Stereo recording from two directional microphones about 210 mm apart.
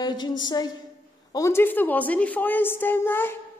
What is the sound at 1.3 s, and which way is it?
A man's voice, 15° left (ahead or behind).